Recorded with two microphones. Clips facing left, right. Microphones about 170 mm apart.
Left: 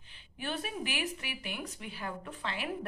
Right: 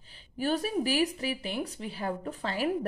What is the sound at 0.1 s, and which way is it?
Speech, 40° right (ahead or behind).